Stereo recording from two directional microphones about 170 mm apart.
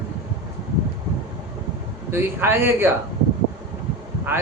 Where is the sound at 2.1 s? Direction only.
15° right (ahead or behind).